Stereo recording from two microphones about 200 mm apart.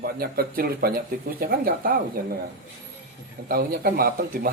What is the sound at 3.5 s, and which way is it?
A man's voice, 50° right (ahead or behind).